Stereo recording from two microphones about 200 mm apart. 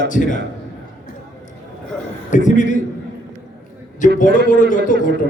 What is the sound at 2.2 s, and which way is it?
Speech, 40° left (ahead or behind).